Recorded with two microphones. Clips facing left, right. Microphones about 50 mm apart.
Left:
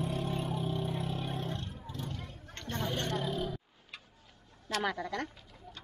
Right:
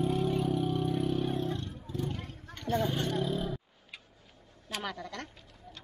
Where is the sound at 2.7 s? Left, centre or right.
Centre.